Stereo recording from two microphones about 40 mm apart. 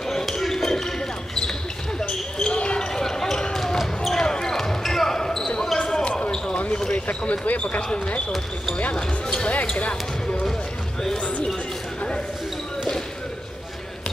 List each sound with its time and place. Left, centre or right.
0.1 s basketball bounce: centre; by 2.9 s left
2.9 s basketball bounce: centre
6.9 s basketball bounce: left
8.9 s speech: centre
9.8 s basketball bounce: left
11.1 s speech: left